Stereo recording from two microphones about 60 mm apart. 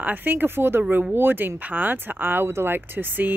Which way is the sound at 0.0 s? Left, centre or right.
Right.